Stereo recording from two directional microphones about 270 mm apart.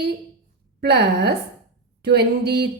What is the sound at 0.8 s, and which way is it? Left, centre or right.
A woman's voice, right.